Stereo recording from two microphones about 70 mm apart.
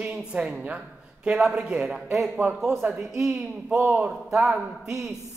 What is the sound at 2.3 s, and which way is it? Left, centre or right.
Speech, right.